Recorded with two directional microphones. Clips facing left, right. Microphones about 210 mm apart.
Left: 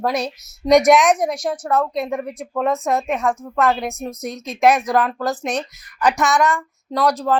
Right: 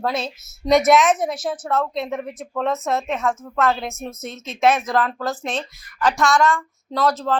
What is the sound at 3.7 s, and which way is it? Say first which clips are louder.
A woman's voice: left 3 dB; centre (ahead or behind).